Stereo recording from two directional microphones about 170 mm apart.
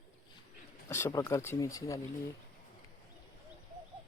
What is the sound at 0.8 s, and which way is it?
Speech, 15° left (ahead or behind).